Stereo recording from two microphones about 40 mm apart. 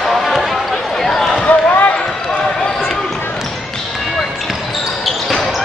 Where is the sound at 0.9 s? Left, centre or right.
Centre.